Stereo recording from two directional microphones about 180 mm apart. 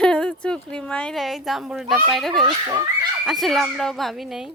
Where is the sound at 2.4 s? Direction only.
25° right (ahead or behind).